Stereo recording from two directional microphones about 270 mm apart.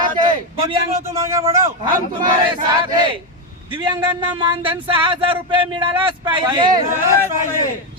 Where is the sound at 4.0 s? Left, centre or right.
Centre.